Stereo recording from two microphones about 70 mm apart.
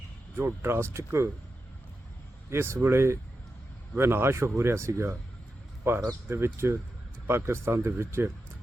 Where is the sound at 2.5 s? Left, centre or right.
Right.